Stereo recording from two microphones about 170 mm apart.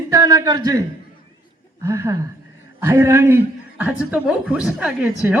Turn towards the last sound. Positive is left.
turn(degrees=-5)  # may be behind; listen again after turning